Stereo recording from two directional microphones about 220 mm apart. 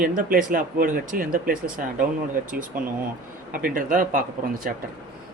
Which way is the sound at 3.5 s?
40° right (ahead or behind).